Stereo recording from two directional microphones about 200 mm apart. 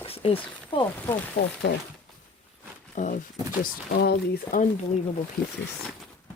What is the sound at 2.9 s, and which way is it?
Speech, 40° left (ahead or behind).